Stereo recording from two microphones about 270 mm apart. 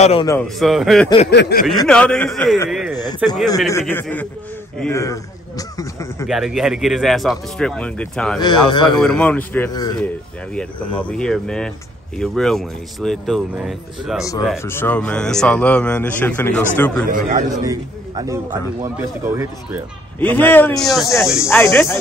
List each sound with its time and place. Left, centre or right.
0.0 s a man's voice: centre
0.4 s speech: centre
1.3 s speech: left
1.9 s speech: centre
6.2 s speech: centre
8.6 s speech: centre
9.0 s speech: centre
11.0 s speech: centre
17.1 s a man's voice: right
17.5 s a man's voice: centre
20.2 s speech: centre